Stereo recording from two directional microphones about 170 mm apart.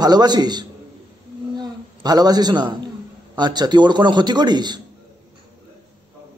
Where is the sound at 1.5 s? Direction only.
25° right (ahead or behind).